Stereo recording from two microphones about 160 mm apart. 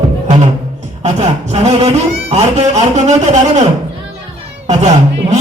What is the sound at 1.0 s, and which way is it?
A man's voice, 45° right (ahead or behind).